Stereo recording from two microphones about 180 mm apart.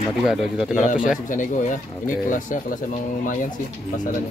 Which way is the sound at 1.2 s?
45° left (ahead or behind).